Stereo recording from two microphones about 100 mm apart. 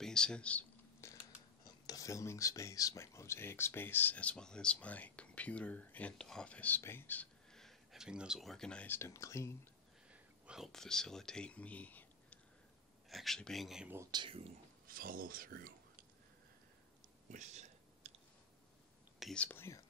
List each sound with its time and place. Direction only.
0.0 s speech: 5° left (ahead or behind)
1.0 s mechanisms: 25° left (ahead or behind)
1.6 s speech: 35° left (ahead or behind); by 7.2 s 20° left (ahead or behind)
7.5 s speech: centre (ahead or behind)
8.8 s speech: 25° left (ahead or behind)
10.1 s a sound: 10° right (ahead or behind)
10.7 s speech: 5° left (ahead or behind)
13.1 s speech: centre (ahead or behind)
14.1 s speech: 55° right (ahead or behind)
18.0 s clicking: 90° right
19.3 s speech: 15° left (ahead or behind)